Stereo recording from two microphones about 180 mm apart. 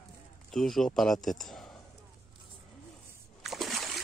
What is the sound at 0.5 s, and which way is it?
Speech, centre (ahead or behind).